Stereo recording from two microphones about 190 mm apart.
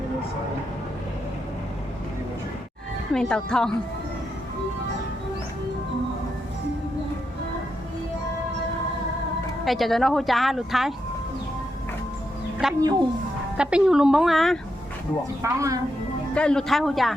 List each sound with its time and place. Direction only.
3.1 s speech: 5° left (ahead or behind)
9.6 s speech: centre (ahead or behind)
12.6 s speech: centre (ahead or behind)
15.4 s a woman's voice: 15° right (ahead or behind)
16.3 s speech: 5° left (ahead or behind)